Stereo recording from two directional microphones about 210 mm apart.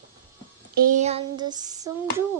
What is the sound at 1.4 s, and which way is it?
Speech, 20° right (ahead or behind).